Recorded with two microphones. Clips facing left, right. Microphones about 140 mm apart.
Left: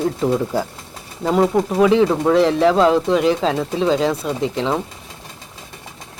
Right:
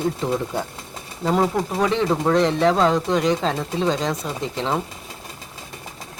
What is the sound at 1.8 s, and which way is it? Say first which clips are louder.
Speech: left 6 dB; 5° left (ahead or behind).